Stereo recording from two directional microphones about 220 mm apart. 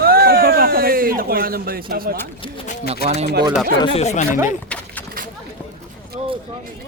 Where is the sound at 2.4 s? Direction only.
35° left (ahead or behind).